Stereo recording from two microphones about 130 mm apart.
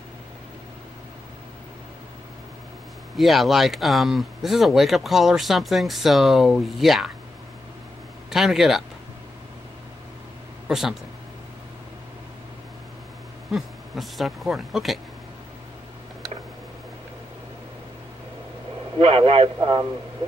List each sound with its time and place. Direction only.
3.2 s speech: centre (ahead or behind)
8.3 s speech: centre (ahead or behind)
10.7 s speech: 5° right (ahead or behind)
13.5 s speech: centre (ahead or behind)
18.9 s a man's voice: 50° right (ahead or behind)